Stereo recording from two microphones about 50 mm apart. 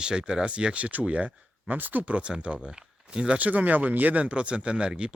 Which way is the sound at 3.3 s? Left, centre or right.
Right.